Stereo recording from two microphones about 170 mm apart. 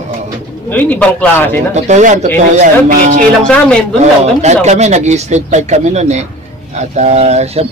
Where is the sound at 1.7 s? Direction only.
45° right (ahead or behind).